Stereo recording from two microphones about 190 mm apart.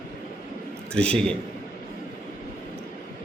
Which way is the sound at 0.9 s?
5° left (ahead or behind).